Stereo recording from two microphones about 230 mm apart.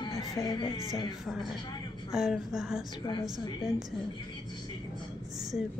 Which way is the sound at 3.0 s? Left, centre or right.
Centre.